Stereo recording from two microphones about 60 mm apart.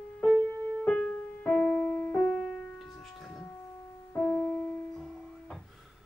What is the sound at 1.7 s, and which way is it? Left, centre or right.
Music, left.